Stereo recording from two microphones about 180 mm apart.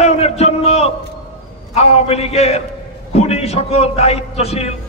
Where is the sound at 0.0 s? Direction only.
35° left (ahead or behind).